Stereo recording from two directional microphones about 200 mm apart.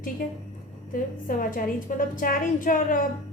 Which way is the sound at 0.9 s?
40° left (ahead or behind).